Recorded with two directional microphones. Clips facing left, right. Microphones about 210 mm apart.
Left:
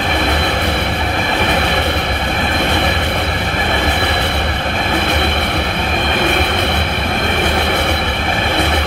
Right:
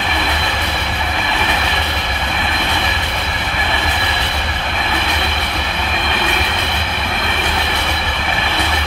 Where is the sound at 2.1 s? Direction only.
40° left (ahead or behind); by 4.5 s 55° left (ahead or behind).